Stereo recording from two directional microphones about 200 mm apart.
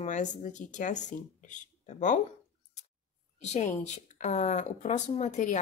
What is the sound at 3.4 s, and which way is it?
A woman's voice, 35° left (ahead or behind).